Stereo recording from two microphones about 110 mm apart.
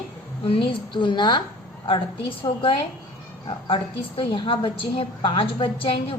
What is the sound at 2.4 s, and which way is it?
A woman's voice, 55° left (ahead or behind).